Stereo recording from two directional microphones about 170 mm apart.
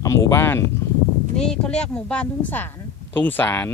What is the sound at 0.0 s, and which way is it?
Speech, 20° left (ahead or behind).